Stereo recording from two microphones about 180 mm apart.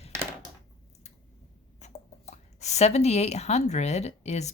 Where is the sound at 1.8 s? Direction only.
40° left (ahead or behind).